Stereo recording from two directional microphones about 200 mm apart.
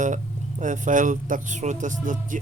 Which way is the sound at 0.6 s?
40° right (ahead or behind).